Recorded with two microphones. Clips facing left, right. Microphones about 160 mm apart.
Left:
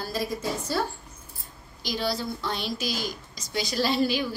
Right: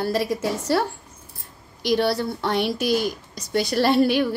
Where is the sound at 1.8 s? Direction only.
65° right (ahead or behind).